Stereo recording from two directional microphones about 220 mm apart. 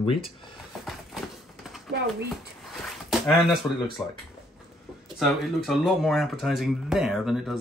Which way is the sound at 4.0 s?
Centre (ahead or behind).